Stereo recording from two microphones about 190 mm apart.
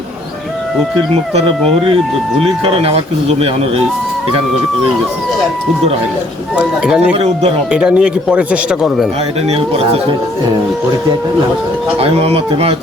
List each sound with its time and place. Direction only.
1.3 s speech: 30° right (ahead or behind)
6.6 s speech: 5° right (ahead or behind)
9.5 s speech: 30° right (ahead or behind)
11.9 s speech: 30° right (ahead or behind)